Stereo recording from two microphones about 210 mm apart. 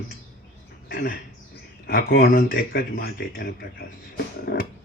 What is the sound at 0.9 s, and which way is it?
Speech, 45° left (ahead or behind).